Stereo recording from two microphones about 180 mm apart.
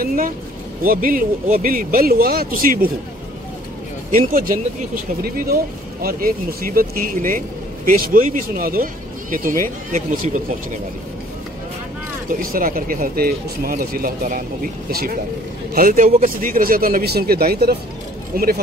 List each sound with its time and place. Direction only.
0.0 s speech: 50° right (ahead or behind)
4.1 s speech: 50° right (ahead or behind)
12.3 s speech: 50° right (ahead or behind)